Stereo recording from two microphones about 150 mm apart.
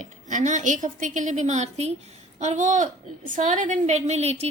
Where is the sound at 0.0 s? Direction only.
55° right (ahead or behind).